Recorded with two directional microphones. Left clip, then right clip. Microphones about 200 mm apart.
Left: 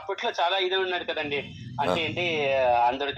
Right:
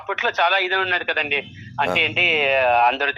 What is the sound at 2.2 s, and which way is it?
Speech, 20° right (ahead or behind).